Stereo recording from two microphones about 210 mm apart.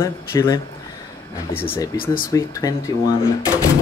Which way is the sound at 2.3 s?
15° left (ahead or behind).